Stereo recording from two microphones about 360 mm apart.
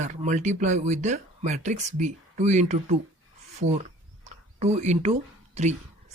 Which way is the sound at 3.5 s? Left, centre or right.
Centre.